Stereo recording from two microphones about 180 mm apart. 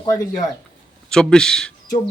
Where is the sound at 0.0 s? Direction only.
20° left (ahead or behind).